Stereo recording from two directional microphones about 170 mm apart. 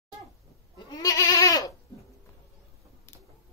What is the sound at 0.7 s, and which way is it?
Goat, 25° left (ahead or behind).